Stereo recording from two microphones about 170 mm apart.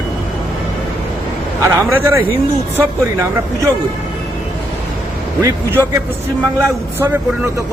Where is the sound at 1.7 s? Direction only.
15° right (ahead or behind).